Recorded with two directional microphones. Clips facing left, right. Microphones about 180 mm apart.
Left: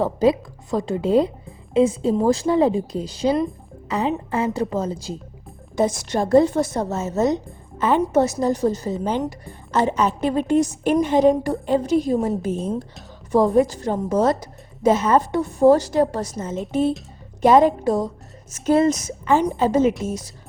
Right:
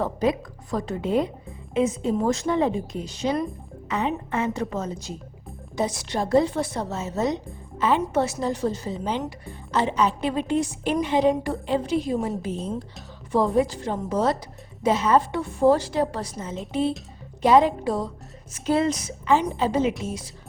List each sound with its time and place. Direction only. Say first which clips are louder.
0.0 s a woman's voice: left 5 dB; 30° left (ahead or behind)
5.7 s speech: left 5 dB; 45° left (ahead or behind)